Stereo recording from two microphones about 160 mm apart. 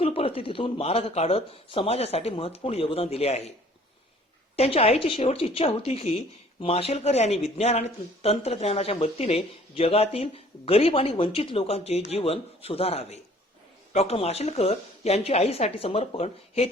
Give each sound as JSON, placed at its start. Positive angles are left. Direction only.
{"t": 0.0, "sound": "speech", "side_deg": 35}
{"t": 4.5, "sound": "speech", "side_deg": 40}